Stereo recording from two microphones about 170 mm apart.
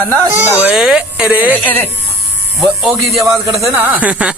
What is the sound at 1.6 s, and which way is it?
Speech, 10° left (ahead or behind).